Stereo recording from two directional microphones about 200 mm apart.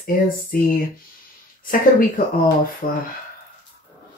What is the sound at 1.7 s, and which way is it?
Speech, 45° left (ahead or behind).